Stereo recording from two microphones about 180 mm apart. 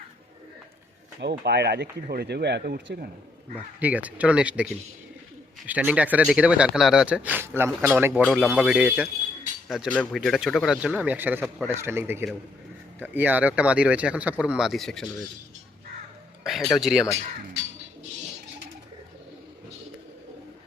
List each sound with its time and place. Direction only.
1.2 s speech: 65° right (ahead or behind)
3.5 s speech: 10° right (ahead or behind)
16.4 s speech: centre (ahead or behind)